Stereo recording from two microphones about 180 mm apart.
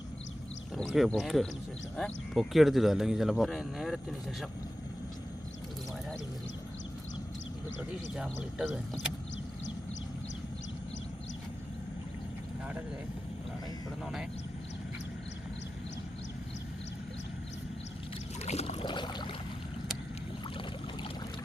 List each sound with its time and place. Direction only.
0.8 s speech: centre (ahead or behind)
7.8 s speech: 5° right (ahead or behind)
14.0 s vehicle: centre (ahead or behind)
18.4 s a sound: 35° left (ahead or behind)